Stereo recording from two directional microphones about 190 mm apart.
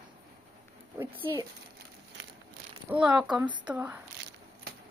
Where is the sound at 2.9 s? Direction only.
5° right (ahead or behind).